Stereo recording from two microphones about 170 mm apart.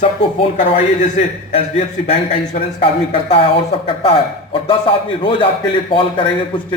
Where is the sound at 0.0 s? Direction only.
35° left (ahead or behind).